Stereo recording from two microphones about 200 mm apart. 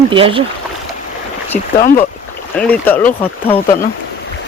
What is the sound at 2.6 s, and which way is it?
Speech, 10° left (ahead or behind).